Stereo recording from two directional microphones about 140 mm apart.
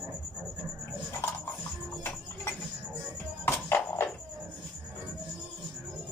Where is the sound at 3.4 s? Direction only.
15° left (ahead or behind).